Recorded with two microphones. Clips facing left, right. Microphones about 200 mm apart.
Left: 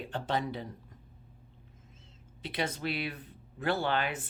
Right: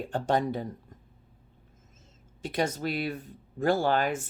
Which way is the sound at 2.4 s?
45° right (ahead or behind).